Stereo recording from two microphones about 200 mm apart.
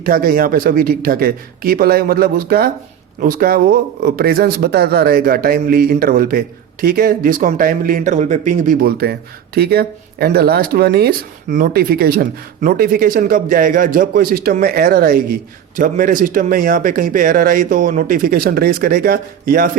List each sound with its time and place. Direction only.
0.0 s speech: 45° right (ahead or behind)